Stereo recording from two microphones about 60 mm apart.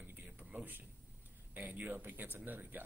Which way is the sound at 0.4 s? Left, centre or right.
Right.